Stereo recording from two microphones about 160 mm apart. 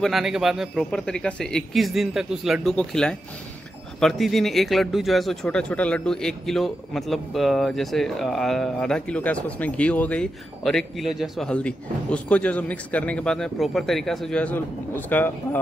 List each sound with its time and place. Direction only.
0.0 s speech: centre (ahead or behind)